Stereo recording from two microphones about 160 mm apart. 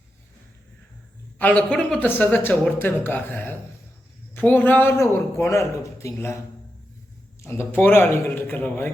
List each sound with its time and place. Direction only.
1.4 s speech: 10° left (ahead or behind)
7.4 s speech: 15° left (ahead or behind)